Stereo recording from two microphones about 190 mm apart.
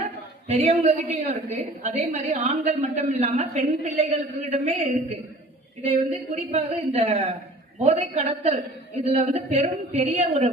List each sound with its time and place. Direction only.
0.0 s a woman's voice: 35° right (ahead or behind)
5.8 s a woman's voice: 35° right (ahead or behind)